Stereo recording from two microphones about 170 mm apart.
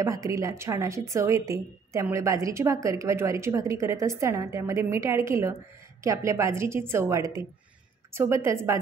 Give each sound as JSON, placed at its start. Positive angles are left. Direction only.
{"t": 0.0, "sound": "a woman's voice", "side_deg": -20}